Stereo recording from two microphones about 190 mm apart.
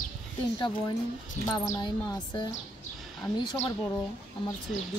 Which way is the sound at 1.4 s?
20° left (ahead or behind).